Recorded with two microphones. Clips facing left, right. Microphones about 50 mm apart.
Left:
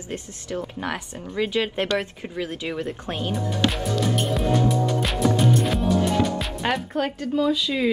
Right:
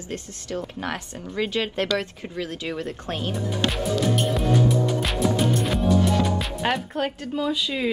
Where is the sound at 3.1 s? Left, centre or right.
Centre.